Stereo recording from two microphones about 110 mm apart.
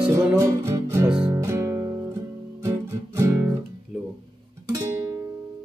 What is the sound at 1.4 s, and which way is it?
Guitar, 25° right (ahead or behind).